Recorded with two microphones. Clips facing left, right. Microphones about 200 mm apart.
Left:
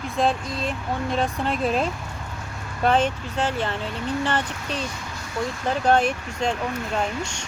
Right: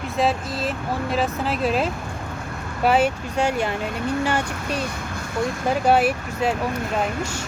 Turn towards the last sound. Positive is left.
turn(degrees=-5)  # may be behind; listen again after turning